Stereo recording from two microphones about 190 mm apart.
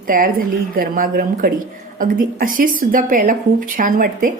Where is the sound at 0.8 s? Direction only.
50° right (ahead or behind).